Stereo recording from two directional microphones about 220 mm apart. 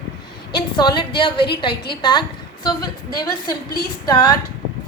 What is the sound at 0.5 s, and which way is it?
A woman's voice, 20° left (ahead or behind).